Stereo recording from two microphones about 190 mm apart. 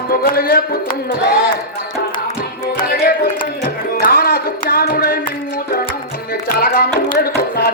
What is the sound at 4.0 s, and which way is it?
Music, 55° left (ahead or behind).